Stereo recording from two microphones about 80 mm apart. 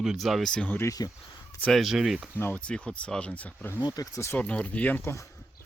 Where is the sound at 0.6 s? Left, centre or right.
Left.